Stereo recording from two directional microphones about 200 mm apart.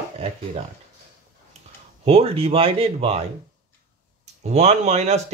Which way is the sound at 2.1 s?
30° right (ahead or behind).